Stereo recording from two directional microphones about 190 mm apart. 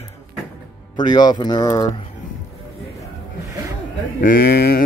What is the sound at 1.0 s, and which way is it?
Speech, 20° left (ahead or behind).